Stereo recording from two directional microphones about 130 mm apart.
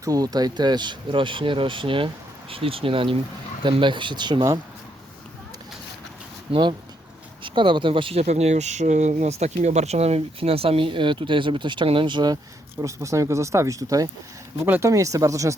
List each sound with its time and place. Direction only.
0.0 s speech: 30° right (ahead or behind)
6.5 s speech: 40° right (ahead or behind)
12.8 s speech: 25° right (ahead or behind)